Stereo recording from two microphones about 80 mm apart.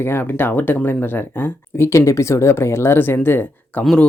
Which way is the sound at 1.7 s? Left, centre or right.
Left.